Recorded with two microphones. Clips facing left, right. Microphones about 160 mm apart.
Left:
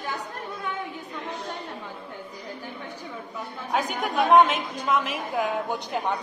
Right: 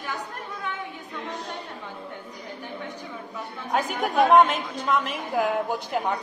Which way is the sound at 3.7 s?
Centre (ahead or behind).